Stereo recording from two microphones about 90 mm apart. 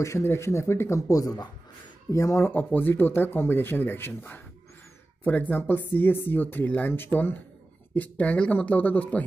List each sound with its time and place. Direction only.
0.0 s speech: 30° left (ahead or behind)